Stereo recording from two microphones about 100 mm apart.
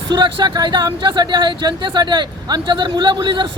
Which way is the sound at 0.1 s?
50° right (ahead or behind).